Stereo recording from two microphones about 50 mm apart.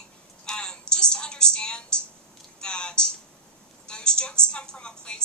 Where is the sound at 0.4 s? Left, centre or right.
Centre.